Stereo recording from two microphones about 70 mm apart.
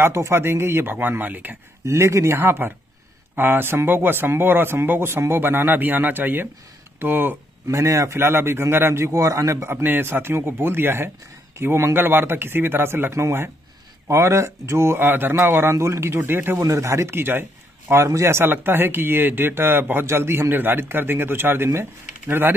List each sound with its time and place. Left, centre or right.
0.0 s a man's voice: right
1.9 s a man's voice: right
7.6 s a man's voice: right
9.1 s speech: right
9.8 s a man's voice: right
16.6 s a man's voice: right